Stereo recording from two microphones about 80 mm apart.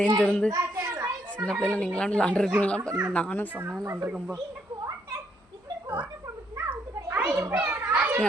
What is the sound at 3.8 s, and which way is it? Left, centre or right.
Speech, right.